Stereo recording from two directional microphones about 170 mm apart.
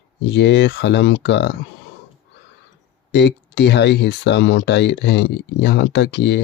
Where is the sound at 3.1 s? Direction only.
85° left.